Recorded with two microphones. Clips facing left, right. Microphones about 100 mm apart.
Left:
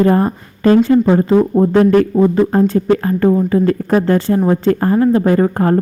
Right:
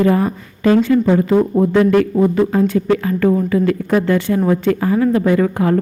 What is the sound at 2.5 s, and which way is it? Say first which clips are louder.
A woman's voice: left 2 dB; 40° left (ahead or behind).